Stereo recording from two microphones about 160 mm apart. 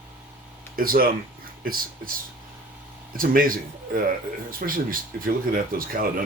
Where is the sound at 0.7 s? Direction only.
65° right (ahead or behind).